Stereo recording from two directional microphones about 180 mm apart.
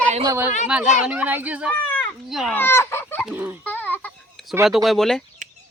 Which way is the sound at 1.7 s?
10° left (ahead or behind).